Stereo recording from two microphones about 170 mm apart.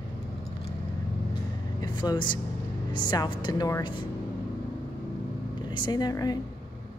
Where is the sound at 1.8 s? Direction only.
25° left (ahead or behind).